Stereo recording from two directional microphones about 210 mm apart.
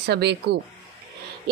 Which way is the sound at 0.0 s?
50° right (ahead or behind).